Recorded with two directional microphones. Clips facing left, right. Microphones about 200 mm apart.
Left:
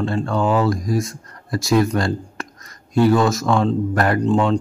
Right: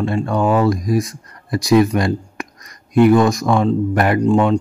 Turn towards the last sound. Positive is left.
turn(degrees=-10)  # may be behind; listen again after turning